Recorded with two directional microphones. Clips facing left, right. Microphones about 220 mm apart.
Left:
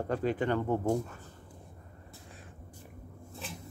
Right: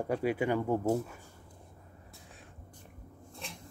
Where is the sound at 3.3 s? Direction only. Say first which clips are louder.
Left 3 dB; 5° left (ahead or behind).